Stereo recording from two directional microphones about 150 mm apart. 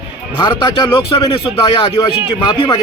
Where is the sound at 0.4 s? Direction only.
30° left (ahead or behind).